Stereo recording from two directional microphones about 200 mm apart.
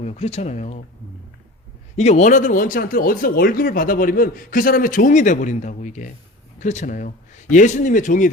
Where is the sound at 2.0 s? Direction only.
35° left (ahead or behind).